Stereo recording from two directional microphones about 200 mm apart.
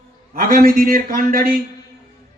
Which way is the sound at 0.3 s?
45° right (ahead or behind).